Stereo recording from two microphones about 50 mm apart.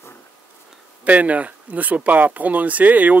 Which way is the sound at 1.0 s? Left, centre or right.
Right.